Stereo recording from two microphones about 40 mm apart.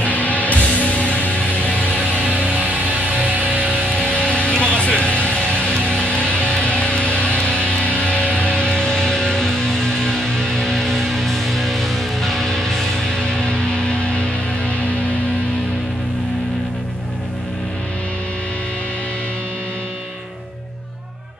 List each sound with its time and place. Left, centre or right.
0.0 s music: left
3.4 s music: left; by 13.2 s centre
13.2 s music: left